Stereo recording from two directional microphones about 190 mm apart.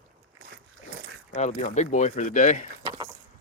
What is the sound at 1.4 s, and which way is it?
Speech, 35° left (ahead or behind).